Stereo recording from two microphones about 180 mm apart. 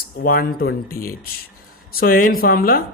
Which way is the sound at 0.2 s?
55° left (ahead or behind).